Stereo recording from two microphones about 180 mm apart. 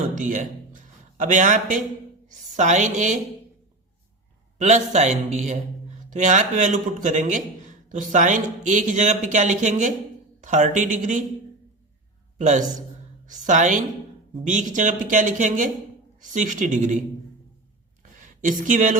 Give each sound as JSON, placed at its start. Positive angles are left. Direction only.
{"t": 0.2, "sound": "a man's voice", "side_deg": -45}
{"t": 4.5, "sound": "a man's voice", "side_deg": -40}
{"t": 12.4, "sound": "a man's voice", "side_deg": -40}
{"t": 18.2, "sound": "speech", "side_deg": -45}